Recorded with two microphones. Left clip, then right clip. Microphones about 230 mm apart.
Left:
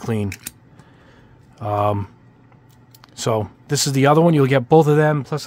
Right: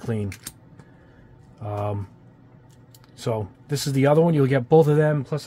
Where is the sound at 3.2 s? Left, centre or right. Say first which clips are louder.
Left 6 dB; left.